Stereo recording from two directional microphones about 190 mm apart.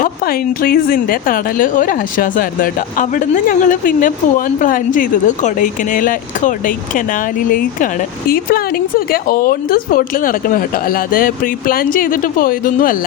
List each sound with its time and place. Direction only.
0.0 s a woman's voice: 50° left (ahead or behind)
8.3 s a woman's voice: 50° left (ahead or behind)